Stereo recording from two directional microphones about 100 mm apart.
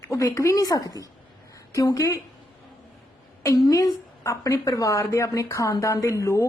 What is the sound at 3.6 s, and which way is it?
A woman's voice, 35° left (ahead or behind).